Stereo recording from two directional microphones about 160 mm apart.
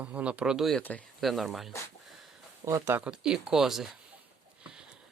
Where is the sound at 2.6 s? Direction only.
15° right (ahead or behind).